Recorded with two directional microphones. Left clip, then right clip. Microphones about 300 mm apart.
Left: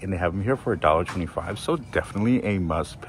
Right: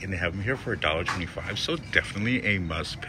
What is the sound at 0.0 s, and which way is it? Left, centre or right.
Speech, centre.